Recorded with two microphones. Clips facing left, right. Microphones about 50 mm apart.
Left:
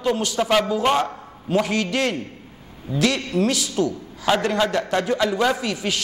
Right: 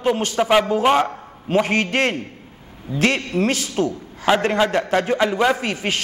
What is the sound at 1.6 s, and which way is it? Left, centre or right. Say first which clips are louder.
A man's voice: right 3 dB; right.